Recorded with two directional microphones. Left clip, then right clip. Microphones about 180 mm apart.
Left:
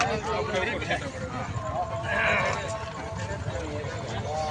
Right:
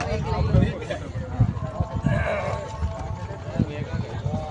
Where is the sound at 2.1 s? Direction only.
75° right (ahead or behind).